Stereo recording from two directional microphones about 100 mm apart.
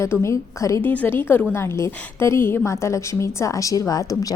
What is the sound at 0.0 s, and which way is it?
Speech, 30° left (ahead or behind).